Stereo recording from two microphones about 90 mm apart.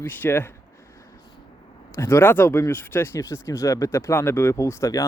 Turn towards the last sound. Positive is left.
turn(degrees=35)  # may be behind; listen again after turning